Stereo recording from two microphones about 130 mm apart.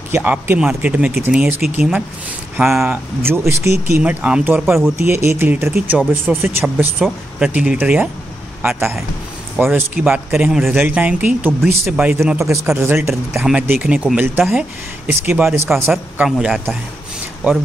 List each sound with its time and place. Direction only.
0.1 s speech: 15° right (ahead or behind)
3.2 s speech: 20° right (ahead or behind)
5.0 s speech: 20° right (ahead or behind)
6.3 s speech: 5° right (ahead or behind)
16.3 s speech: 5° right (ahead or behind)